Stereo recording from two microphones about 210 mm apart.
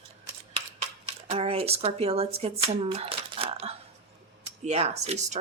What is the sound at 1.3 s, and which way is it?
Speech, 30° right (ahead or behind).